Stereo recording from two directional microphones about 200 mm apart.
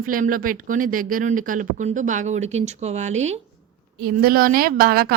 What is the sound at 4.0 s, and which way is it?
Speech, 50° right (ahead or behind).